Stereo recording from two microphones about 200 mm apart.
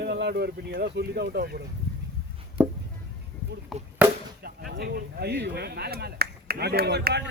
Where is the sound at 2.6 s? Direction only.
10° right (ahead or behind).